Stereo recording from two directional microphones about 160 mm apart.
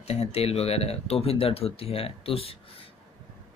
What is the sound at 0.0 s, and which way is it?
Speech, 40° left (ahead or behind).